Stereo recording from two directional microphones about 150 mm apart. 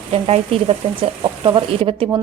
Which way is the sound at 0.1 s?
40° right (ahead or behind).